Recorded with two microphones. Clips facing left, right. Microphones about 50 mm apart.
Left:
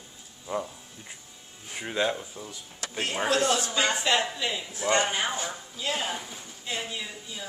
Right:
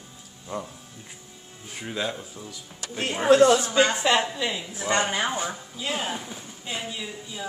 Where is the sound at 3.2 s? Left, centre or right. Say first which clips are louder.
Right 9 dB; right.